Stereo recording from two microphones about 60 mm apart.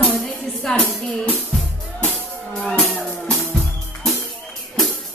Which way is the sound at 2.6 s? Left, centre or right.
Centre.